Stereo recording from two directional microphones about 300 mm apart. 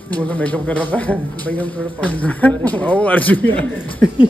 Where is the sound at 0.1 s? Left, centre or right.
Centre.